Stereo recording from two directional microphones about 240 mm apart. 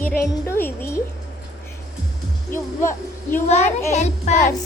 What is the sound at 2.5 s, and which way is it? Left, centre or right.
A child's voice, left.